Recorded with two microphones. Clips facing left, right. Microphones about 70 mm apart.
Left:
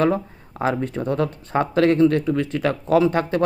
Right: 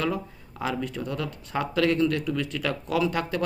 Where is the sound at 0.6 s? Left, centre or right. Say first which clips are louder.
Left 7 dB; left.